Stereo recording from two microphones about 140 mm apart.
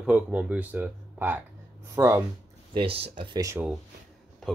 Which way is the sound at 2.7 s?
40° right (ahead or behind).